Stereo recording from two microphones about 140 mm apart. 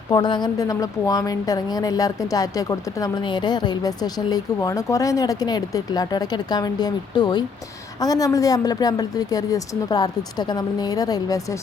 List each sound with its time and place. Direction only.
0.1 s a woman's voice: 30° left (ahead or behind)